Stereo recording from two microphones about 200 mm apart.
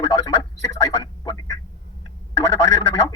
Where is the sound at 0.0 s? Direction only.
15° left (ahead or behind).